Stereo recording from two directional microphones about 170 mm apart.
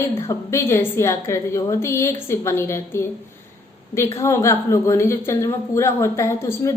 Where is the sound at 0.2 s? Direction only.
15° left (ahead or behind).